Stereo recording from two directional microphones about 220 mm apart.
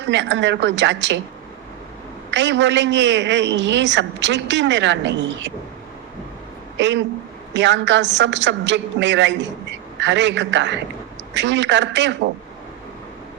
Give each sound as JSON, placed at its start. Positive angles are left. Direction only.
{"t": 0.1, "sound": "a woman's voice", "side_deg": -55}
{"t": 2.3, "sound": "a woman's voice", "side_deg": -55}
{"t": 6.7, "sound": "a woman's voice", "side_deg": -55}